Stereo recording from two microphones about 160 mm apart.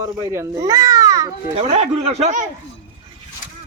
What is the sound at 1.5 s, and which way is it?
Speech, 40° right (ahead or behind).